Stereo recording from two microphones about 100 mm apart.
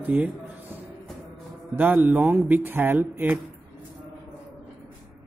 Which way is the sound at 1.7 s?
20° right (ahead or behind).